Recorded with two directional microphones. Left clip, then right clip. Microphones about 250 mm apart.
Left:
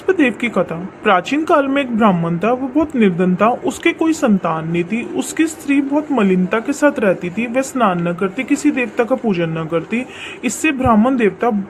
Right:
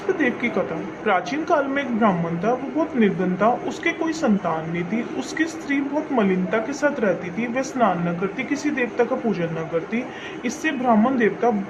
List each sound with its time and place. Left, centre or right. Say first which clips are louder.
0.2 s speech: left 6 dB; left